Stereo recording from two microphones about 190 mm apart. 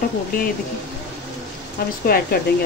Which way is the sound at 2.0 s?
50° left (ahead or behind).